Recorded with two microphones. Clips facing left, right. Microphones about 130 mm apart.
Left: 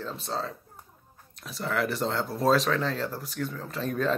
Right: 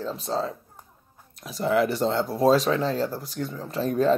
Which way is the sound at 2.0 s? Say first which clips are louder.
Right 5 dB; centre (ahead or behind).